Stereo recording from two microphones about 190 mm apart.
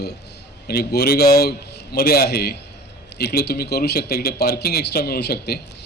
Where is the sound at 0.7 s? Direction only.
55° left (ahead or behind).